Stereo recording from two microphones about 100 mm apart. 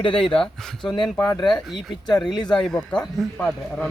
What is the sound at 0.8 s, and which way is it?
Speech, 50° left (ahead or behind).